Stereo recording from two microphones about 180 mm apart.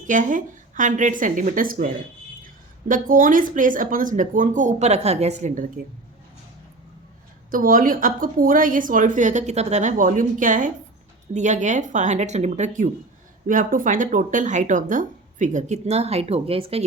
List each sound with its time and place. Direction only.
0.1 s a woman's voice: 45° right (ahead or behind)
7.5 s a woman's voice: 50° right (ahead or behind); by 16.8 s 30° right (ahead or behind)